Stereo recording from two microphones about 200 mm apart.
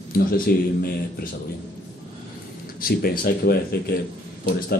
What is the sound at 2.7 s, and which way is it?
Speech, 45° left (ahead or behind).